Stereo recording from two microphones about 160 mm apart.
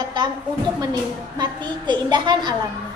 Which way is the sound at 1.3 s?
25° right (ahead or behind).